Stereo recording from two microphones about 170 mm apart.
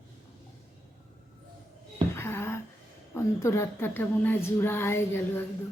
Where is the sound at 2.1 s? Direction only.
15° left (ahead or behind).